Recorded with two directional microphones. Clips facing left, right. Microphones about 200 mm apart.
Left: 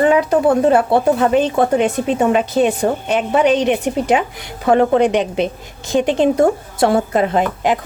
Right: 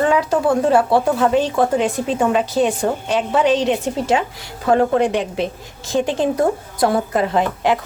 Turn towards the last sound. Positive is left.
turn(degrees=20)  # may be behind; listen again after turning